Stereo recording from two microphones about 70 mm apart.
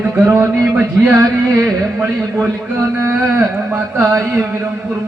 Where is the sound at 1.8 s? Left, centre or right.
Right.